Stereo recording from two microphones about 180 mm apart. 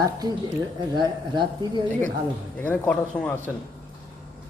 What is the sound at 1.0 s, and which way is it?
Speech, 25° right (ahead or behind).